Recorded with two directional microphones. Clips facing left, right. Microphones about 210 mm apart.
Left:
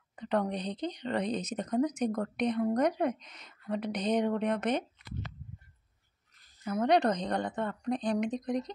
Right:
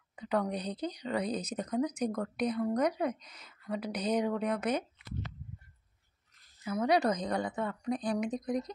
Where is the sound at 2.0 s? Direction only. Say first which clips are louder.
Left 2 dB; 30° left (ahead or behind).